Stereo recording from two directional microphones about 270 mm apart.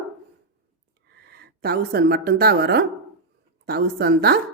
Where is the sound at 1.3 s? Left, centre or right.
Right.